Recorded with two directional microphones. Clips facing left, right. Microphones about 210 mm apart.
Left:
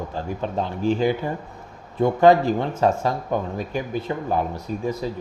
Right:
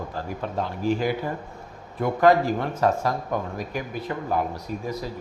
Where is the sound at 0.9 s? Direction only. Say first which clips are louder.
Left 3 dB; 25° left (ahead or behind).